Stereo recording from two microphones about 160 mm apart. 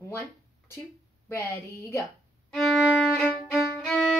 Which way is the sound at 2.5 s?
Centre (ahead or behind).